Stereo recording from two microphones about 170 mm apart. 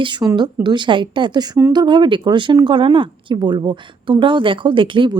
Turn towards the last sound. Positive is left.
turn(degrees=-30)  # may be behind; listen again after turning